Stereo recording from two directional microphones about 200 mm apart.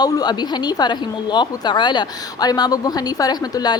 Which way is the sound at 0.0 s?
20° left (ahead or behind).